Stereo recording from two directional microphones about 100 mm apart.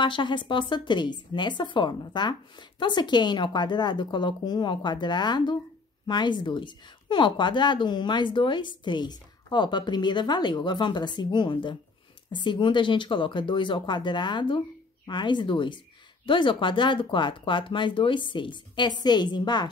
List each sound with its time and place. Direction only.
0.0 s a woman's voice: 50° left (ahead or behind)